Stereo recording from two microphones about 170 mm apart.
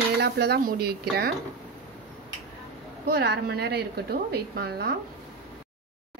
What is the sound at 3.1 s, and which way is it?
A woman's voice, 70° right (ahead or behind).